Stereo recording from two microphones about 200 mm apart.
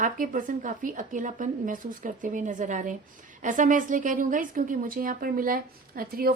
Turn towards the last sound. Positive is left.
turn(degrees=-45)  # may be behind; listen again after turning